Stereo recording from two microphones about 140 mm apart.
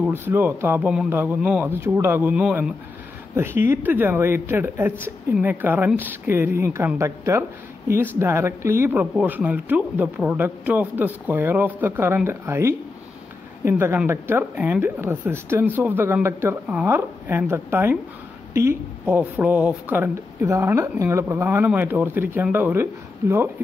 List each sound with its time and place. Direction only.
0.0 s speech: 15° right (ahead or behind)